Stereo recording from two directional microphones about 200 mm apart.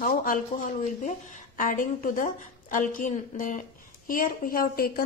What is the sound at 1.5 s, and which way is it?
A woman's voice, 40° left (ahead or behind).